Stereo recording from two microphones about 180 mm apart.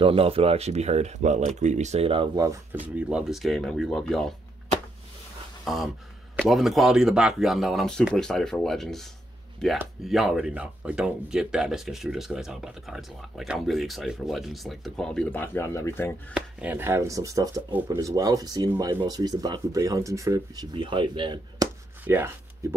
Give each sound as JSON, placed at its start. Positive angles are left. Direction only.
{"t": 0.0, "sound": "speech", "side_deg": -30}
{"t": 3.0, "sound": "speech", "side_deg": -5}
{"t": 6.3, "sound": "speech", "side_deg": 0}
{"t": 16.3, "sound": "speech", "side_deg": -10}
{"t": 22.0, "sound": "speech", "side_deg": -10}